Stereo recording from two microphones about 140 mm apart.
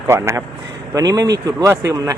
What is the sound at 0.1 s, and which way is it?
Speech, 20° right (ahead or behind).